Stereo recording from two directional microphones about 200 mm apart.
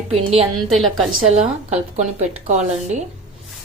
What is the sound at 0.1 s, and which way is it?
Speech, 30° right (ahead or behind).